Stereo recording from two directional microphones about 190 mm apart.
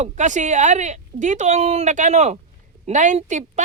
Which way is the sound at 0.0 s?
40° right (ahead or behind).